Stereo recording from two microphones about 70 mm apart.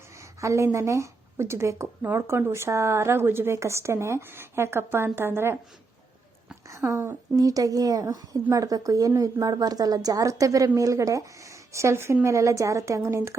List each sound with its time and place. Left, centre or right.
0.2 s a woman's voice: right
6.7 s speech: right
7.3 s speech: right